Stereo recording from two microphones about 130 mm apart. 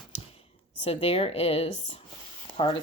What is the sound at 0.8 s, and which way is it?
Speech, 45° left (ahead or behind).